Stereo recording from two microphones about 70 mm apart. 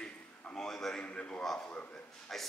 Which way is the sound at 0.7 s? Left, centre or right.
Centre.